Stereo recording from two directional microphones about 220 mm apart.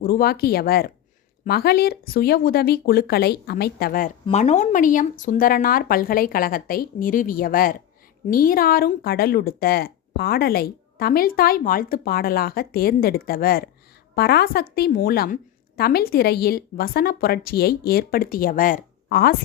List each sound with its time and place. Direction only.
0.0 s speech: 40° left (ahead or behind)